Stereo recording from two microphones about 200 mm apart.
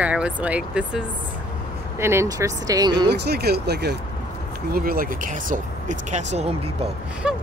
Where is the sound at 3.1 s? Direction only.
55° right (ahead or behind); by 6.9 s 30° right (ahead or behind).